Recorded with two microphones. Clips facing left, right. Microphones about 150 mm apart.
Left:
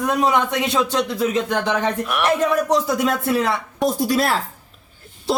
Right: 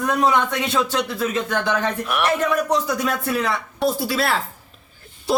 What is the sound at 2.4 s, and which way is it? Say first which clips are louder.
Speech: left 2 dB; 30° left (ahead or behind).